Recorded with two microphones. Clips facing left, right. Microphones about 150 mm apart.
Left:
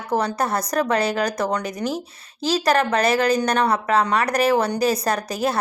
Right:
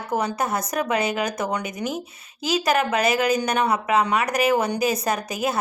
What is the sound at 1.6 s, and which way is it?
Speech, 35° left (ahead or behind).